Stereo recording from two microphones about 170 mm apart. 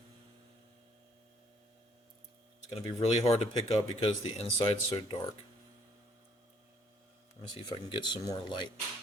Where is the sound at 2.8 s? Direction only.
40° left (ahead or behind).